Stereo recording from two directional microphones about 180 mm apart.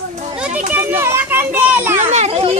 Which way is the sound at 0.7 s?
15° right (ahead or behind).